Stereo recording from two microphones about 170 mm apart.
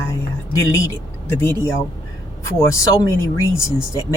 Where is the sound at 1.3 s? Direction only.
15° left (ahead or behind).